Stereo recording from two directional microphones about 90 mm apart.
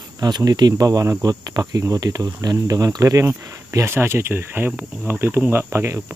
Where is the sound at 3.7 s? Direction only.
30° right (ahead or behind).